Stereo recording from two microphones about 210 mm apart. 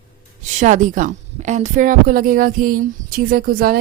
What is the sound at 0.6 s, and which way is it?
A woman's voice, 35° right (ahead or behind).